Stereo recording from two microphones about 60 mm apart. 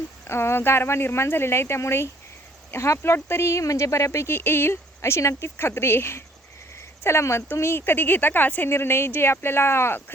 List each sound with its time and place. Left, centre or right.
0.3 s speech: left
8.7 s speech: left